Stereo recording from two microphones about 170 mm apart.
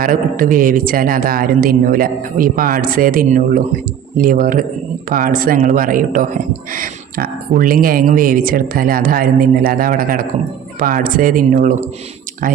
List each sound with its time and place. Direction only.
0.0 s speech: 55° right (ahead or behind)